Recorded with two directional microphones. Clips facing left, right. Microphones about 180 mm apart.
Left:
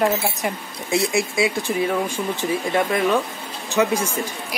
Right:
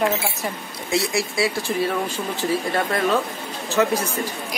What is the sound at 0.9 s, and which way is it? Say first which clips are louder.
Speech: left 2 dB; 20° left (ahead or behind).